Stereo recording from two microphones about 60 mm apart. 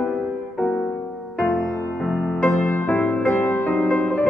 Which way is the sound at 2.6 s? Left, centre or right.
Left.